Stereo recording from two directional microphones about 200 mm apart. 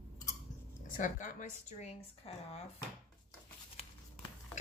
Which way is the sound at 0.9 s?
40° left (ahead or behind).